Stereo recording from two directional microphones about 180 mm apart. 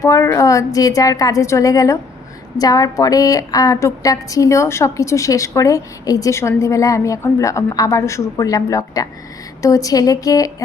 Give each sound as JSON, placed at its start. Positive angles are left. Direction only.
{"t": 0.0, "sound": "a woman's voice", "side_deg": 15}